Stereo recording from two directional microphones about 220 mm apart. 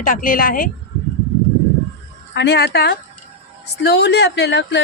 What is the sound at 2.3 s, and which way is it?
A woman's voice, 50° left (ahead or behind).